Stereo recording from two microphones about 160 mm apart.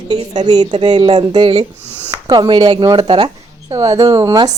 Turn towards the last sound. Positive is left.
turn(degrees=-25)  # may be behind; listen again after turning